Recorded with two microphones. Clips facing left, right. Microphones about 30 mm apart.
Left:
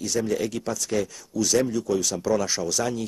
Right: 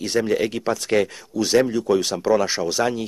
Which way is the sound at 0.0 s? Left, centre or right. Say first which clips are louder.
Right 5 dB; right.